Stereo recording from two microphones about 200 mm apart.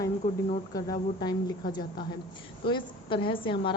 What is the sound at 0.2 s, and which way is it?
Speech, 45° left (ahead or behind).